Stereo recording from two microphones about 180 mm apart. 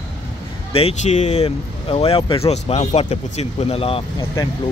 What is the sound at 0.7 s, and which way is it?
Speech, 35° left (ahead or behind).